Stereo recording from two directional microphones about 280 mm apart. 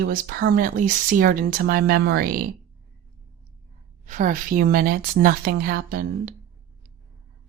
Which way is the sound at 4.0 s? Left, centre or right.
Right.